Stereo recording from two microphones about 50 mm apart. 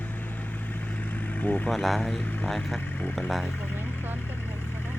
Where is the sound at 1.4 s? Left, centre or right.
Left.